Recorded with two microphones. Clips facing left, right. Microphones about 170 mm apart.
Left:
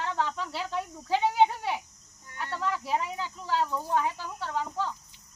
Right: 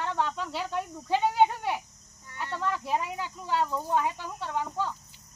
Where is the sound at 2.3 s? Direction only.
15° right (ahead or behind).